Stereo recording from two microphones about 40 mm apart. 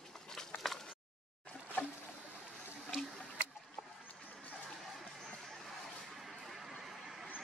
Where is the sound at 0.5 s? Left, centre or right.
Left.